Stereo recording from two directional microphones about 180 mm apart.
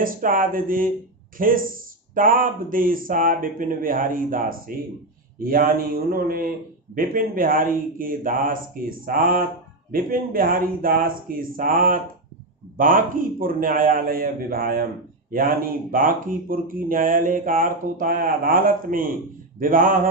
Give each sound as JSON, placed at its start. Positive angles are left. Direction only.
{"t": 0.0, "sound": "speech", "side_deg": -50}